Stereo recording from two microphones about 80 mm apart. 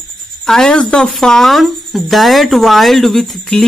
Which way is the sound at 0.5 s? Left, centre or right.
Centre.